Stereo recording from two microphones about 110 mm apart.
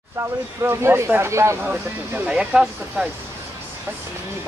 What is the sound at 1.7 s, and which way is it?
Speech, 10° right (ahead or behind).